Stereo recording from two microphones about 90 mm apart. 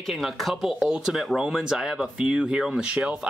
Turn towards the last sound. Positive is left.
turn(degrees=-10)  # may be behind; listen again after turning